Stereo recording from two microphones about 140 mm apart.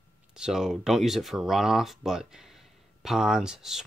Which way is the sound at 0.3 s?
5° right (ahead or behind).